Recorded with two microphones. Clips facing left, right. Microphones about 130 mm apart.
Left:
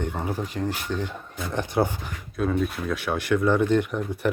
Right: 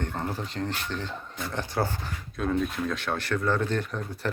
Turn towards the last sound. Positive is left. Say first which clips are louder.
# left 6 dB
turn(degrees=15)  # may be behind; listen again after turning